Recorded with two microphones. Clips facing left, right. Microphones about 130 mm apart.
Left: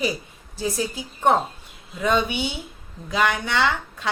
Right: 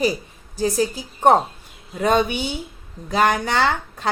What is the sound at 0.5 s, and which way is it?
A woman's voice, 40° right (ahead or behind).